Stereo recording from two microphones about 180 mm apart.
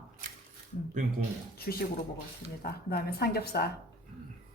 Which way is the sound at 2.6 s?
60° left (ahead or behind).